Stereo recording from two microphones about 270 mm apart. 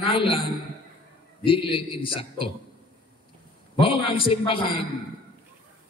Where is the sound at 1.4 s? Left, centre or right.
Centre.